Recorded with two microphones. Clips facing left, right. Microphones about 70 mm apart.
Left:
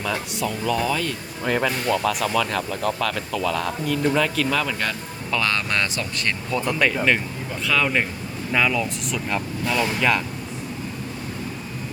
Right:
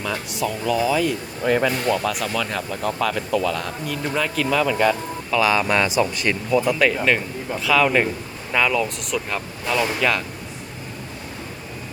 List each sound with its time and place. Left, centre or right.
0.0 s speech: centre